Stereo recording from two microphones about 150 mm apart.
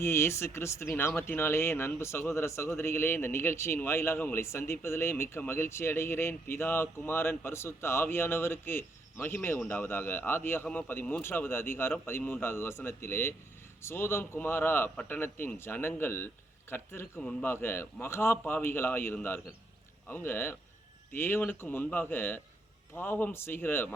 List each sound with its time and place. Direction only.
0.0 s speech: 15° left (ahead or behind)